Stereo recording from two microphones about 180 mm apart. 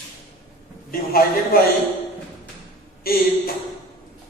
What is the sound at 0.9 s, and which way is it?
Speech, 55° left (ahead or behind).